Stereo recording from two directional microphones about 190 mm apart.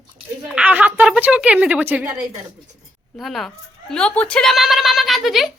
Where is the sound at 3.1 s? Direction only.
Centre (ahead or behind).